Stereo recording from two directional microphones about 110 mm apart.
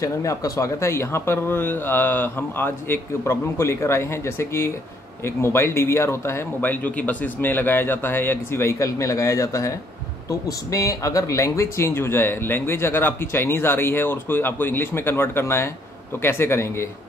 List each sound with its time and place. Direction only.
0.0 s speech: 30° left (ahead or behind)